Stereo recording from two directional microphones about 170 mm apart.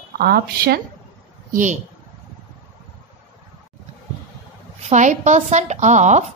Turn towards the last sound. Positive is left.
turn(degrees=-45)  # may be behind; listen again after turning